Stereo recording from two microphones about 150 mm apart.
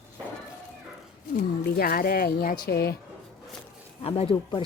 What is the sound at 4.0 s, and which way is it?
Speech, 40° left (ahead or behind).